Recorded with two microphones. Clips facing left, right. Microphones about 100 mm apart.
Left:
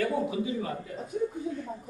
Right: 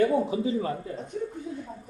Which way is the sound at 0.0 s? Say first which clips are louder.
Right 5 dB; 30° right (ahead or behind).